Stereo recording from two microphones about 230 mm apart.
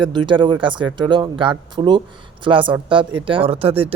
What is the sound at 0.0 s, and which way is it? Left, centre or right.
Speech, right.